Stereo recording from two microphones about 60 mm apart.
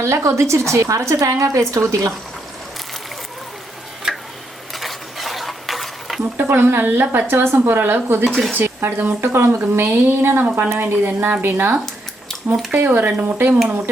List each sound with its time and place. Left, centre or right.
0.0 s a woman's voice: right
4.1 s tick-tock: centre
4.7 s stir: centre
6.3 s a woman's voice: right